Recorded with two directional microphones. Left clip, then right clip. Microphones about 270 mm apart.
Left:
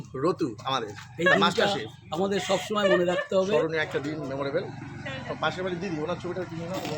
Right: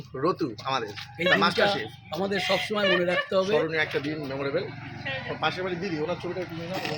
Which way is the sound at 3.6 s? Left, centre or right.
Centre.